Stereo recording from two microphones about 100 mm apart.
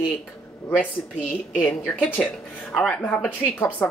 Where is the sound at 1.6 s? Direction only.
15° left (ahead or behind).